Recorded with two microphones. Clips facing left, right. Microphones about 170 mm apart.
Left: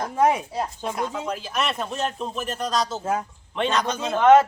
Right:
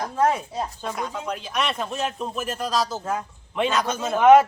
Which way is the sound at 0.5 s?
Centre (ahead or behind).